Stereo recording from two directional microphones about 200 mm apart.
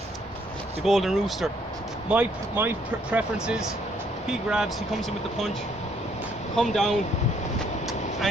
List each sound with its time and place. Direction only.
0.9 s speech: centre (ahead or behind)
6.6 s speech: centre (ahead or behind)